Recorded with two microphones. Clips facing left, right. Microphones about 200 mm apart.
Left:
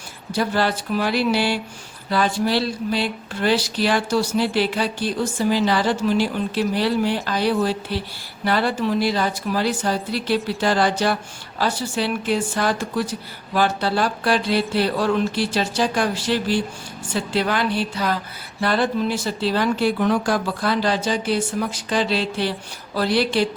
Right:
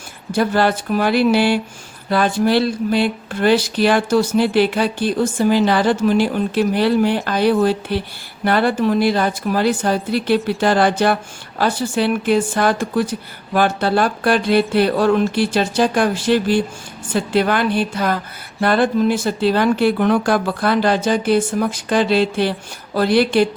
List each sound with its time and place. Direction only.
0.3 s speech: 55° right (ahead or behind)